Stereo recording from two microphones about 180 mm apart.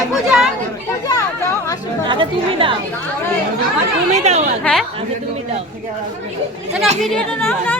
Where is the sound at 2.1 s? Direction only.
30° right (ahead or behind).